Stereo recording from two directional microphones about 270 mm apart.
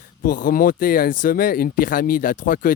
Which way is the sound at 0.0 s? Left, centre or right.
Left.